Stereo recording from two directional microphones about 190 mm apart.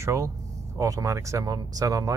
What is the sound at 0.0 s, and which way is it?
Speech, 15° right (ahead or behind).